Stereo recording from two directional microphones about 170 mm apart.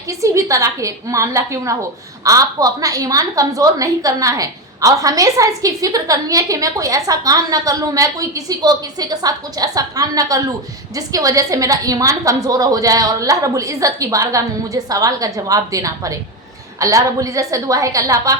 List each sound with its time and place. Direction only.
0.1 s a woman's voice: 20° right (ahead or behind)